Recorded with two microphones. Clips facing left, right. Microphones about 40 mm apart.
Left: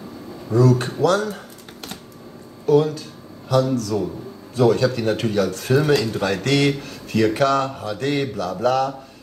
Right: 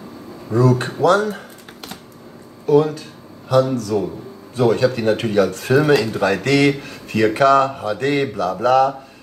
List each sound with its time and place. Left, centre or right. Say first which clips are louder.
0.5 s speech: right 1 dB; centre